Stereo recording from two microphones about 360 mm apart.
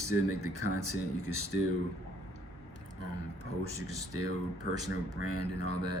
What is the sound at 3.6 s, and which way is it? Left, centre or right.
Speech, right.